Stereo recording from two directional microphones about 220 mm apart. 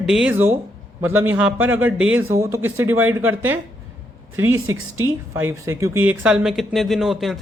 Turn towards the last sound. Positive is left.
turn(degrees=0)  # may be behind; listen again after turning